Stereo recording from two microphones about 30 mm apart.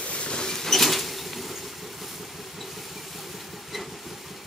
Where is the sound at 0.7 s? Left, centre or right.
Centre.